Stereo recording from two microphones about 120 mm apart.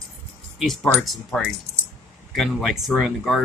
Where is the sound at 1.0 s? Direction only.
Centre (ahead or behind).